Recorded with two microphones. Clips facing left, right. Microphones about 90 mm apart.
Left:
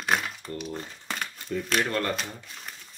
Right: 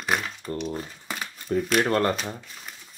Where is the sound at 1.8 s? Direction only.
40° right (ahead or behind).